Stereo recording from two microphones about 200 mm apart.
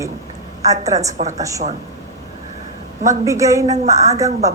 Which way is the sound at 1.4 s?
15° right (ahead or behind).